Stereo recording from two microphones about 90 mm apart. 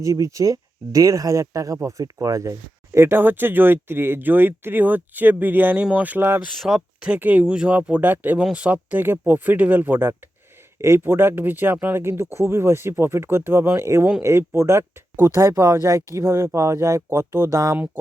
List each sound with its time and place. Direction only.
0.0 s speech: 35° right (ahead or behind)
6.6 s speech: 5° right (ahead or behind); by 17.6 s 30° right (ahead or behind)